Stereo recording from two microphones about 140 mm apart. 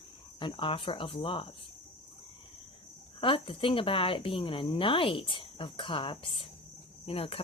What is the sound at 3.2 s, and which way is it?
Speech, 40° left (ahead or behind).